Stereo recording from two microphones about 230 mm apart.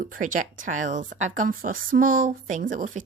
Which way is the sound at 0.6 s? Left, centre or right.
Right.